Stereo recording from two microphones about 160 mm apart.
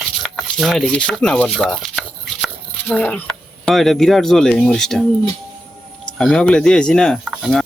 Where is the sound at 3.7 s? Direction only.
Centre (ahead or behind).